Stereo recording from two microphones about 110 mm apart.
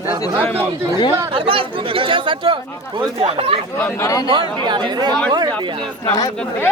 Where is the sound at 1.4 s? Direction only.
55° right (ahead or behind).